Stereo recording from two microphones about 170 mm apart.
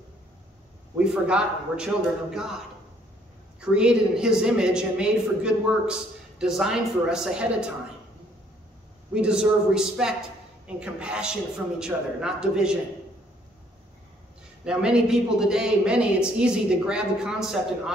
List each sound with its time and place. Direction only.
0.9 s a woman's voice: 5° right (ahead or behind)
3.7 s a woman's voice: 5° right (ahead or behind)
9.1 s a woman's voice: 5° right (ahead or behind)
14.6 s a woman's voice: 5° right (ahead or behind)